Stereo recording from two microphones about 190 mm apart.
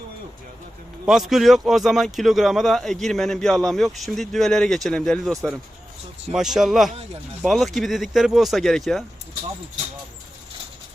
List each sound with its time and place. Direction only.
1.0 s a man's voice: centre (ahead or behind)
6.3 s a man's voice: centre (ahead or behind)